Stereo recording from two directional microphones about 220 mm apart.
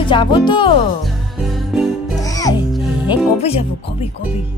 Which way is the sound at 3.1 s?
25° left (ahead or behind).